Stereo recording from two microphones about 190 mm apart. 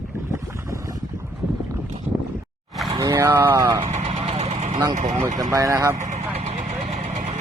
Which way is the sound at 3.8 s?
35° right (ahead or behind).